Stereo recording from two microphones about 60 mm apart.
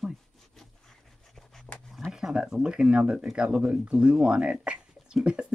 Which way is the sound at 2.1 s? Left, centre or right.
Centre.